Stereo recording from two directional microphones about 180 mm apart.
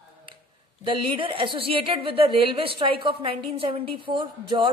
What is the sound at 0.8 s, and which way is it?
A woman's voice, 30° right (ahead or behind).